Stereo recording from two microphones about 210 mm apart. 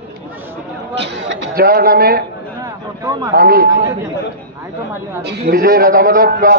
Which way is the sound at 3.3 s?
45° right (ahead or behind).